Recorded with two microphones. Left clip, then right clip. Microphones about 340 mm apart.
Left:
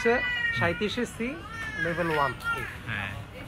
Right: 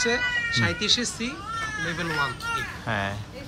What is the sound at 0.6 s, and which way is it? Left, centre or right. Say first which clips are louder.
Speech: right 4 dB; centre.